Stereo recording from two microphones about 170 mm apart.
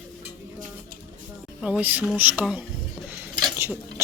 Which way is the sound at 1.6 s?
5° right (ahead or behind).